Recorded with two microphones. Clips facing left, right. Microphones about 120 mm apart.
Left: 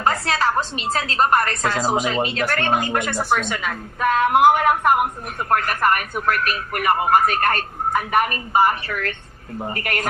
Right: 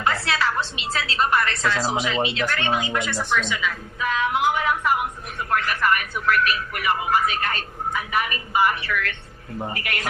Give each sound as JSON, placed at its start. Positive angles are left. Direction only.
{"t": 0.0, "sound": "a woman's voice", "side_deg": 40}